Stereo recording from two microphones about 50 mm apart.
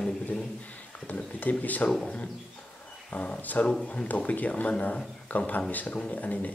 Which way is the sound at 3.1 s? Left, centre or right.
Left.